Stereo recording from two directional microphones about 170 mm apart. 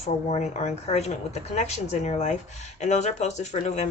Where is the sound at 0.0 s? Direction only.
40° left (ahead or behind).